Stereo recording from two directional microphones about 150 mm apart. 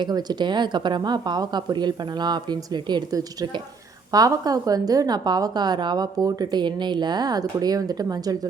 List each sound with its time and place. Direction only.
0.0 s a woman's voice: 25° right (ahead or behind)